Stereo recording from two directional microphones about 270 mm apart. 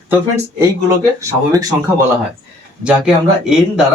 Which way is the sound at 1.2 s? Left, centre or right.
Centre.